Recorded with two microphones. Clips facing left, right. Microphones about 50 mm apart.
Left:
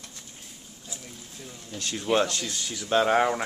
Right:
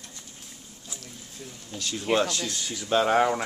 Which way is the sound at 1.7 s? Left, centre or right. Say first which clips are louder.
Even; centre.